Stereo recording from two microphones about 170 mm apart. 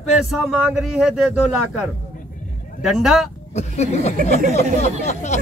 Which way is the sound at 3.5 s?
40° left (ahead or behind).